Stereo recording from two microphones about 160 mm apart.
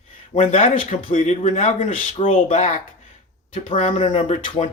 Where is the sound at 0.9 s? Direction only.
40° left (ahead or behind).